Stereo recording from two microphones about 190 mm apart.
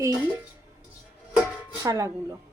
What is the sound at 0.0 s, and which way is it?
Speech, 15° right (ahead or behind).